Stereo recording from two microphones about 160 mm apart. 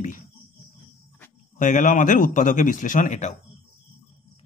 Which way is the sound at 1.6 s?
50° left (ahead or behind).